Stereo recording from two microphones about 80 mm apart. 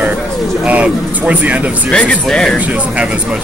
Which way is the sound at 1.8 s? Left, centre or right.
Centre.